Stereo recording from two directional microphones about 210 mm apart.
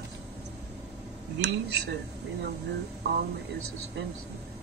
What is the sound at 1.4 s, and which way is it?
Speech, 55° right (ahead or behind).